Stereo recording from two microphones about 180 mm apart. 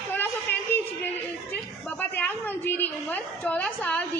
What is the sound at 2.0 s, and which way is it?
A woman's voice, 10° left (ahead or behind).